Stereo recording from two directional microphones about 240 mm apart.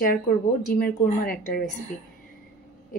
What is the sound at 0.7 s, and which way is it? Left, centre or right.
Speech, left.